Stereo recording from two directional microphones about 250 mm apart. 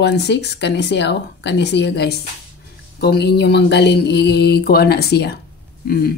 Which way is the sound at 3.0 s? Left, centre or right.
Left.